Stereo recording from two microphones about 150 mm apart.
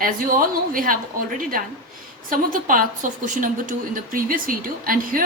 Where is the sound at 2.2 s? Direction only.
65° right (ahead or behind).